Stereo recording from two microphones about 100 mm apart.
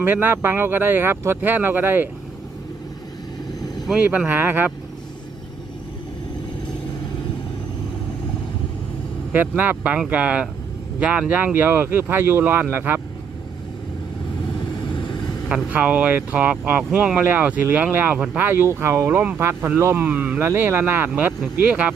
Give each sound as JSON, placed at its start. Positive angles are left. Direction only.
{"t": 0.0, "sound": "speech", "side_deg": -20}
{"t": 4.0, "sound": "speech", "side_deg": -15}
{"t": 9.6, "sound": "speech", "side_deg": -15}
{"t": 15.4, "sound": "speech", "side_deg": -10}